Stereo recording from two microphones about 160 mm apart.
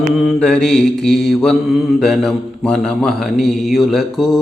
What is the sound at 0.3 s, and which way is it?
Mantra, 5° left (ahead or behind).